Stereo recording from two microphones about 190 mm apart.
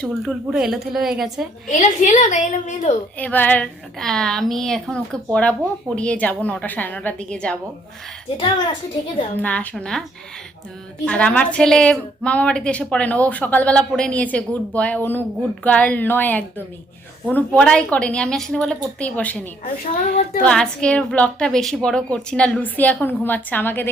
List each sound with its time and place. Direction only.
0.0 s a woman's voice: centre (ahead or behind)
1.8 s a woman's voice: 40° left (ahead or behind)
3.2 s a woman's voice: 10° left (ahead or behind)
8.4 s a child's voice: 25° left (ahead or behind)
9.4 s speech: 10° left (ahead or behind)
11.0 s a woman's voice: 5° left (ahead or behind)
19.6 s a woman's voice: 45° left (ahead or behind)
20.4 s a woman's voice: 5° left (ahead or behind)